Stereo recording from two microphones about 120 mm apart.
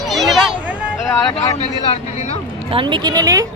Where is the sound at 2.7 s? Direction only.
40° right (ahead or behind).